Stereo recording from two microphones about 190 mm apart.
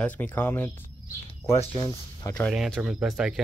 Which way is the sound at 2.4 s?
Centre (ahead or behind).